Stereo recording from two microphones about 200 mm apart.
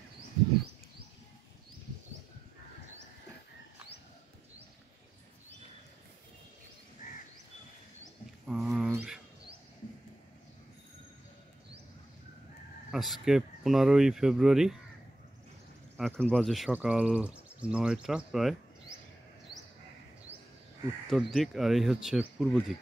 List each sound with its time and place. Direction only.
7.0 s crow: 40° left (ahead or behind)
8.5 s a sound: 5° right (ahead or behind)
12.9 s speech: centre (ahead or behind)
16.0 s speech: 5° left (ahead or behind)
21.1 s speech: centre (ahead or behind)